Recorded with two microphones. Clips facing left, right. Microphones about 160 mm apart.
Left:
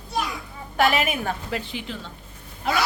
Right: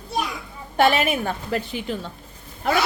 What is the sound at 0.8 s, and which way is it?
Speech, 30° right (ahead or behind).